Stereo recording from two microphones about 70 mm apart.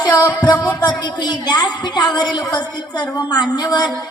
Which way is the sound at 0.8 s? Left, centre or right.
Left.